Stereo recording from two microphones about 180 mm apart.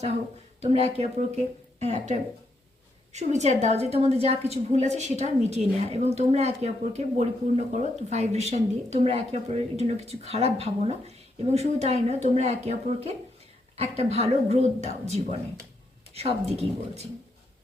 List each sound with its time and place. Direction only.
0.6 s a woman's voice: 35° right (ahead or behind)